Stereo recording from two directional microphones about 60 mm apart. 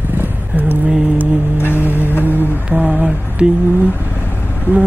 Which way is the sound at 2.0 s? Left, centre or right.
Left.